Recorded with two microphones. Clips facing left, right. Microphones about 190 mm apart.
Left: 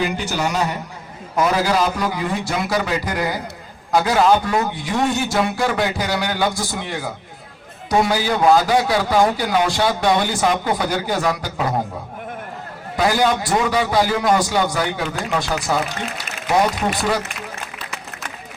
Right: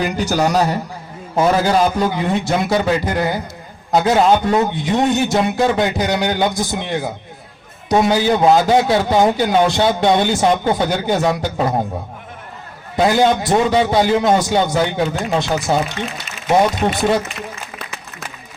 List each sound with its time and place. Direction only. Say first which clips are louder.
0.0 s a man's voice: right 4 dB; 40° right (ahead or behind)
1.4 s a man's voice: right 4 dB; 25° right (ahead or behind)
13.0 s a man's voice: right 4 dB; 25° right (ahead or behind)